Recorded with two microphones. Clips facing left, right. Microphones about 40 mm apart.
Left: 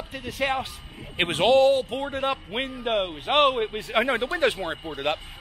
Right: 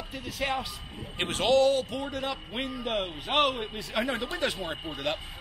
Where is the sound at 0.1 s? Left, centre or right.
Left.